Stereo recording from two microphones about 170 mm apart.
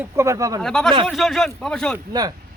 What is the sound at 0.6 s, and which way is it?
Speech, 5° left (ahead or behind).